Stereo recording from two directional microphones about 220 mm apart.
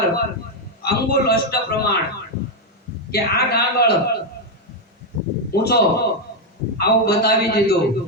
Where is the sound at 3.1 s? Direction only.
45° left (ahead or behind).